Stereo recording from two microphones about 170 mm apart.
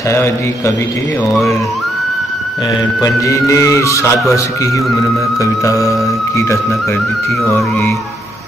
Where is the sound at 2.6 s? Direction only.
20° left (ahead or behind).